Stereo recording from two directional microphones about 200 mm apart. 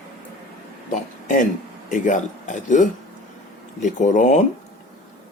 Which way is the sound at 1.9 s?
40° left (ahead or behind).